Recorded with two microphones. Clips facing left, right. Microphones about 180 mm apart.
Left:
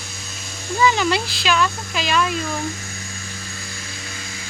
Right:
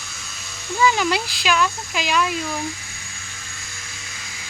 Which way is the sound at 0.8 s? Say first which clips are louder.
Left 1 dB; 5° right (ahead or behind).